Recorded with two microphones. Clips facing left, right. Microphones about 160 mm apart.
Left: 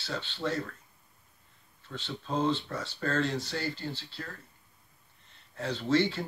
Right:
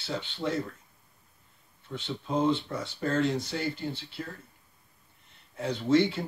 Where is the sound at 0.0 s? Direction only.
15° right (ahead or behind).